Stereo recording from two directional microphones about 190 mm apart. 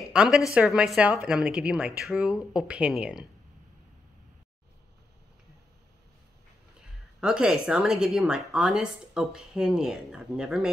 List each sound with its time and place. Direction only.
0.1 s a woman's voice: 5° right (ahead or behind)
7.2 s a woman's voice: 5° right (ahead or behind)